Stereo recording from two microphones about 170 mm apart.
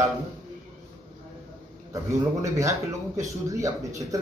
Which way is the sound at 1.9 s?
20° right (ahead or behind).